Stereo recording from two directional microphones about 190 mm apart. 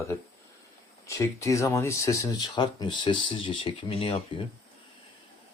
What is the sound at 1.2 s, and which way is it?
Speech, 15° left (ahead or behind).